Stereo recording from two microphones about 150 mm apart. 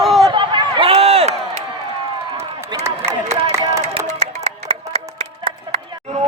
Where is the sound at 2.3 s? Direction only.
20° right (ahead or behind).